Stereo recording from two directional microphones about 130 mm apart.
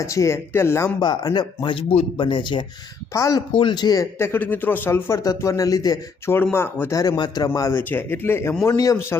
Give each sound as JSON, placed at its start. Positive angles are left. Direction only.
{"t": 0.0, "sound": "a man's voice", "side_deg": 25}
{"t": 0.9, "sound": "speech", "side_deg": 35}
{"t": 3.1, "sound": "a man's voice", "side_deg": 25}
{"t": 3.5, "sound": "speech", "side_deg": 40}
{"t": 4.2, "sound": "a man's voice", "side_deg": 15}